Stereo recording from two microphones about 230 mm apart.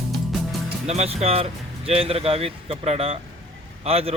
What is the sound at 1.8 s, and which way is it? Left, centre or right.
Speech, right.